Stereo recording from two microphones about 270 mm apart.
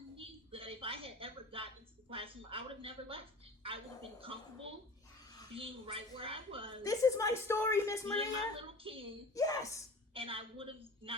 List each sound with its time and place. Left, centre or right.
0.2 s a sound: centre
5.5 s a woman's voice: centre
6.8 s a woman's voice: centre
8.1 s a woman's voice: right
9.3 s a woman's voice: centre
10.2 s a woman's voice: centre